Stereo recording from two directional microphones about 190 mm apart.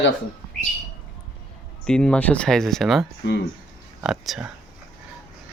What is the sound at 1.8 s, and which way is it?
Speech, 5° left (ahead or behind).